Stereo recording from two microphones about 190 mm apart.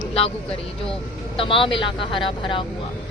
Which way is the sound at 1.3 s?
30° left (ahead or behind).